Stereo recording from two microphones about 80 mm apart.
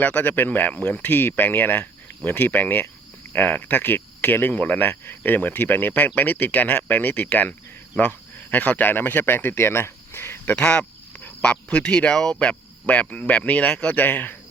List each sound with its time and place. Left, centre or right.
0.0 s cricket: left
7.9 s speech: left
10.5 s speech: centre